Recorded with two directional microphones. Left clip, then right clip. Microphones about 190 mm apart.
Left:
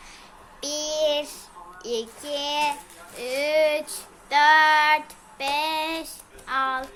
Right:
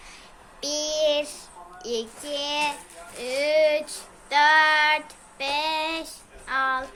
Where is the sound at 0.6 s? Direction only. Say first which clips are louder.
Right 1 dB; 15° left (ahead or behind).